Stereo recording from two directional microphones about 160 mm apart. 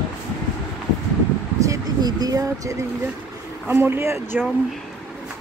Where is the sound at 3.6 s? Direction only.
15° right (ahead or behind).